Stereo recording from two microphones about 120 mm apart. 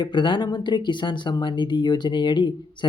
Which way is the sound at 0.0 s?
40° left (ahead or behind).